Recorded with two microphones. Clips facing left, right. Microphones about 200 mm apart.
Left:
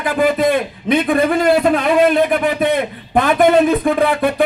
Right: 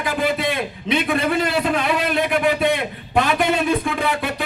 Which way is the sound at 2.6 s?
50° left (ahead or behind).